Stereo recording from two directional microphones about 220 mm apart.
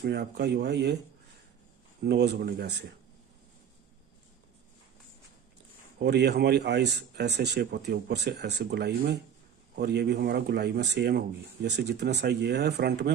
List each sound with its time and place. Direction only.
0.0 s speech: 50° right (ahead or behind)
2.0 s speech: 50° right (ahead or behind)
5.9 s speech: 50° right (ahead or behind)